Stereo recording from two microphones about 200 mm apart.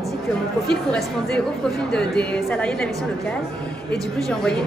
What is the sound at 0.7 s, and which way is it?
Speech, 5° left (ahead or behind).